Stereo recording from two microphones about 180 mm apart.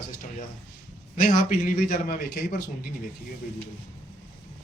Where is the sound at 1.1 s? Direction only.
50° left (ahead or behind).